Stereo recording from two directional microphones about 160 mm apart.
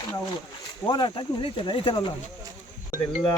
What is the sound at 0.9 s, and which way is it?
Speech, 30° left (ahead or behind).